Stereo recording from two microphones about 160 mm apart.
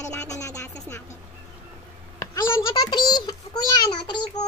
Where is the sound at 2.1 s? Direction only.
25° left (ahead or behind).